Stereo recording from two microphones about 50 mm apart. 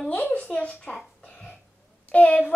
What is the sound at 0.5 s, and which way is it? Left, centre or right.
Speech, left.